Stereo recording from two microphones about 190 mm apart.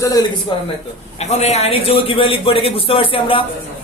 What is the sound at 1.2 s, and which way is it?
A man's voice, 35° left (ahead or behind).